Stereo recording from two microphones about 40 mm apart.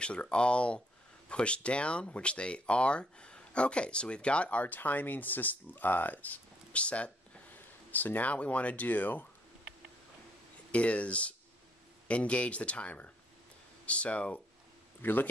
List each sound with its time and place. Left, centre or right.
0.0 s speech: left
7.5 s speech: left
10.7 s speech: left
15.0 s speech: left